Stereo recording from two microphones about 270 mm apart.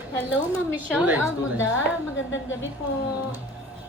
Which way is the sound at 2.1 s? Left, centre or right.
Left.